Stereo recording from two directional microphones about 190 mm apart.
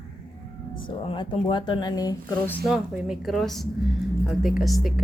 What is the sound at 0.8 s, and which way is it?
Speech, 25° left (ahead or behind).